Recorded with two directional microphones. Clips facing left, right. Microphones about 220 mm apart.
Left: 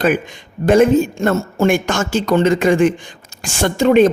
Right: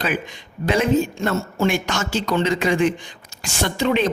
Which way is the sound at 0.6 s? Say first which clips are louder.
Left 7 dB; 50° left (ahead or behind).